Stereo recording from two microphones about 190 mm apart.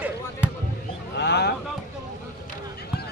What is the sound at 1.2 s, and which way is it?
Speech, 60° left (ahead or behind).